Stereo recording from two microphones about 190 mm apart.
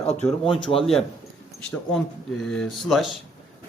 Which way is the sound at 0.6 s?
30° left (ahead or behind).